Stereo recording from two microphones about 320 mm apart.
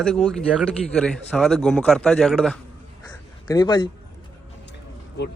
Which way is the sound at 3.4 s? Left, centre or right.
Centre.